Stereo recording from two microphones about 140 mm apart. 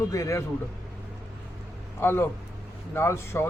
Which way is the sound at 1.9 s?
15° left (ahead or behind).